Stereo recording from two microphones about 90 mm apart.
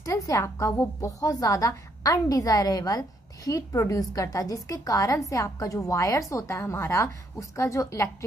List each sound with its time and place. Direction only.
0.0 s a woman's voice: 40° left (ahead or behind)